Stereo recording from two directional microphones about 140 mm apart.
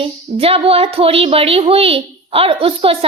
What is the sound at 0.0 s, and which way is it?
Child singing, 45° right (ahead or behind).